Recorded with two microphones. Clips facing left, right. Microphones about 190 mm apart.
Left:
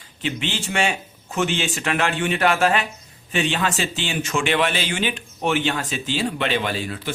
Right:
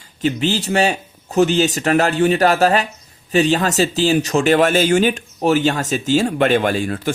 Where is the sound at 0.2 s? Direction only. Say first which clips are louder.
Right 8 dB; 40° right (ahead or behind).